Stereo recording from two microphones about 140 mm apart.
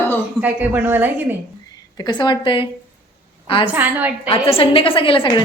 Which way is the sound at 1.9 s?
30° left (ahead or behind).